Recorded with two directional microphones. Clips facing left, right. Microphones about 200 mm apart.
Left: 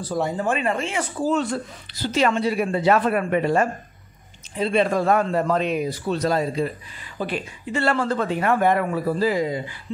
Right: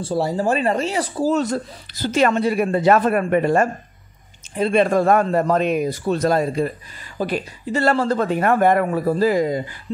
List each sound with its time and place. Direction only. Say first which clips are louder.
0.0 s speech: right 3 dB; 30° right (ahead or behind); by 6.7 s 50° right (ahead or behind)
7.2 s speech: right 4 dB; 40° right (ahead or behind)